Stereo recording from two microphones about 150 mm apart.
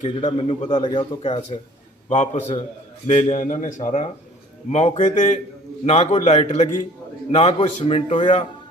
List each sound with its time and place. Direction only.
0.2 s a man's voice: 40° left (ahead or behind)
2.0 s a man's voice: 50° left (ahead or behind)